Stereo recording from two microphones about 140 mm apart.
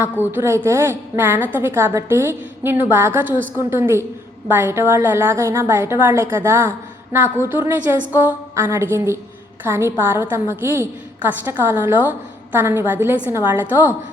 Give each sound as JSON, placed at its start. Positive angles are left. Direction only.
{"t": 0.0, "sound": "a woman's voice", "side_deg": -15}